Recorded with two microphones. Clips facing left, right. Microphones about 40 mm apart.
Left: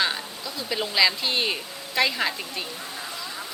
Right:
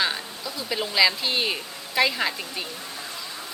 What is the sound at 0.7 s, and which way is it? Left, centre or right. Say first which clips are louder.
Speech: right 1 dB; centre.